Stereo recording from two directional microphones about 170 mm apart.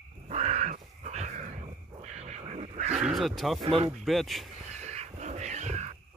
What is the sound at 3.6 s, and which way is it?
Speech, 35° right (ahead or behind).